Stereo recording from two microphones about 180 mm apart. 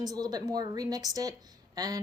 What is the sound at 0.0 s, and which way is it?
A woman's voice, 20° right (ahead or behind).